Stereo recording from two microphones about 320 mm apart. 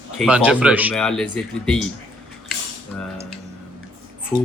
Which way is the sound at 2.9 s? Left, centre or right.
Centre.